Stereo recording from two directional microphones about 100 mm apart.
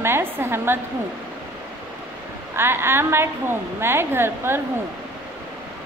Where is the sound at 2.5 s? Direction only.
25° right (ahead or behind).